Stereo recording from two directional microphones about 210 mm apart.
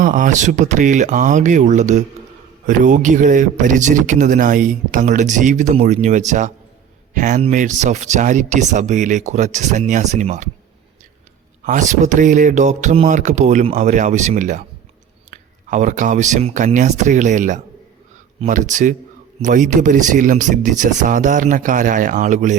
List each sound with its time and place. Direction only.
0.0 s speech: 40° right (ahead or behind)
11.6 s speech: 35° right (ahead or behind)